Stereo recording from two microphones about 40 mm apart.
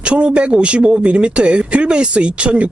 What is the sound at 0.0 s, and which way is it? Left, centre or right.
Speech, right.